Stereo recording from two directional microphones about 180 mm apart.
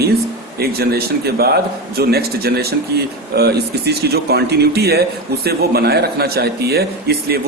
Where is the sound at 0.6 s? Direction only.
60° right (ahead or behind).